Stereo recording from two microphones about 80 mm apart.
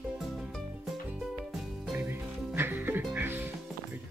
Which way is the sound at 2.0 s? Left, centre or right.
Right.